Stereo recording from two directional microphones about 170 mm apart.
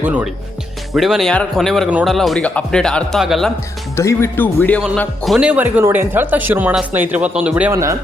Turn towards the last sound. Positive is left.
turn(degrees=-15)  # may be behind; listen again after turning